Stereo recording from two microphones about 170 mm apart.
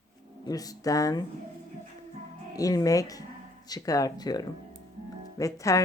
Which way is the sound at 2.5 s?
20° left (ahead or behind).